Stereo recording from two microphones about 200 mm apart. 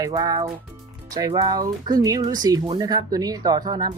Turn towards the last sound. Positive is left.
turn(degrees=-20)  # may be behind; listen again after turning